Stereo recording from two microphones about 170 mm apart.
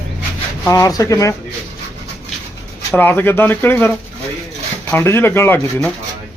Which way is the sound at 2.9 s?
10° left (ahead or behind).